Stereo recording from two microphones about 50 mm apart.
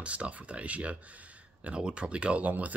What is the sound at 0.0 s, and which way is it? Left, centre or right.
Speech, right.